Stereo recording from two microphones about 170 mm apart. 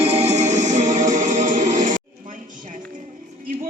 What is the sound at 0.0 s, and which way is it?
Music, 35° right (ahead or behind).